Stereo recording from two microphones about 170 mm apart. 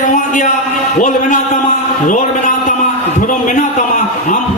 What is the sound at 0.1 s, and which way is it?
A man's voice, 45° left (ahead or behind).